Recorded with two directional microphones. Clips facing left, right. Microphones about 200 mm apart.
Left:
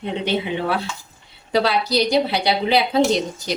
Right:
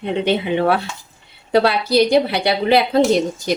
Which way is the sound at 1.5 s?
55° right (ahead or behind).